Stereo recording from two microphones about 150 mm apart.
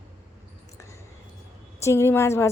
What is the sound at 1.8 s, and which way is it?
Speech, 15° left (ahead or behind).